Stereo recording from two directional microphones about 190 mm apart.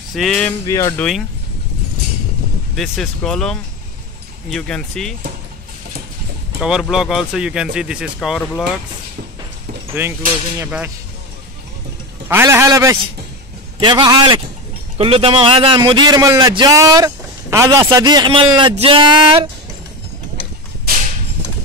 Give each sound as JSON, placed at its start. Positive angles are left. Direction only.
{"t": 0.1, "sound": "speech", "side_deg": 0}
{"t": 0.7, "sound": "speech", "side_deg": 15}
{"t": 2.7, "sound": "speech", "side_deg": 0}
{"t": 6.6, "sound": "speech", "side_deg": -5}
{"t": 10.0, "sound": "a man's voice", "side_deg": -15}
{"t": 12.3, "sound": "a man's voice", "side_deg": -10}